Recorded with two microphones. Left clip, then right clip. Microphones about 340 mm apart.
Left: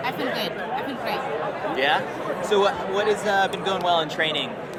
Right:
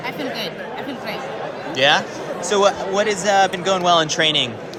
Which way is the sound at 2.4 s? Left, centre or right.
Right.